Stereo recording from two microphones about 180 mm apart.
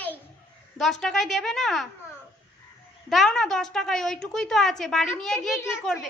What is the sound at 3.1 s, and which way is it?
A woman's voice, centre (ahead or behind).